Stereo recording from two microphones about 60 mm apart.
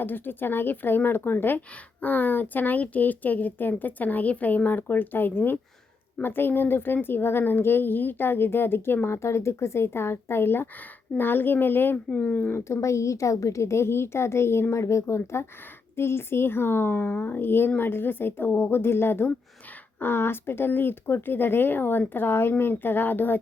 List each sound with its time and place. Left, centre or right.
0.0 s speech: left
12.1 s speech: centre
12.5 s a woman's voice: left